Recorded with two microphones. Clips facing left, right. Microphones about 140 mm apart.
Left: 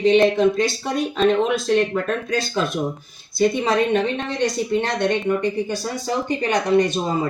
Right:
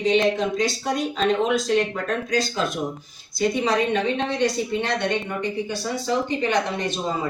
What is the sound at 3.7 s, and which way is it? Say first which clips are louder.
Speech: left 3 dB; 50° left (ahead or behind).